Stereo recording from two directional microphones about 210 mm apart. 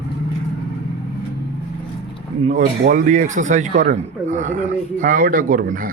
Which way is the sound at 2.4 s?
40° right (ahead or behind).